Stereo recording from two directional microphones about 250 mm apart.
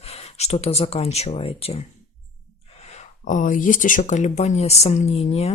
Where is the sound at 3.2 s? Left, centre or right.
Left.